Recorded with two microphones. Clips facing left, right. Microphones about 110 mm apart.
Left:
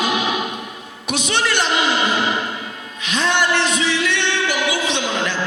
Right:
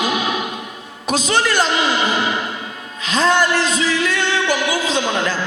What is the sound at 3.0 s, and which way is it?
Music, 35° right (ahead or behind).